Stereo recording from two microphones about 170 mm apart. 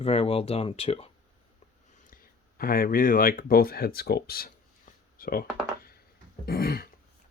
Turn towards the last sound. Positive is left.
turn(degrees=60)  # may be behind; listen again after turning